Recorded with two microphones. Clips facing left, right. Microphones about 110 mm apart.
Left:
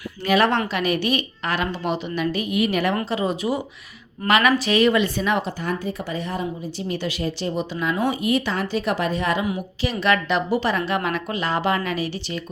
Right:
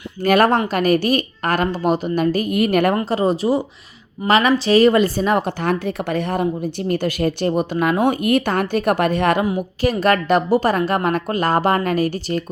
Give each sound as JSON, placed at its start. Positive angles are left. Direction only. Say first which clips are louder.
{"t": 0.2, "sound": "a woman's voice", "louder": "right 4 dB", "side_deg": -45}
{"t": 2.9, "sound": "speech", "louder": "right 5 dB", "side_deg": -35}
{"t": 5.5, "sound": "speech", "louder": "right 6 dB", "side_deg": -65}
{"t": 9.8, "sound": "a woman's voice", "louder": "right 4 dB", "side_deg": -45}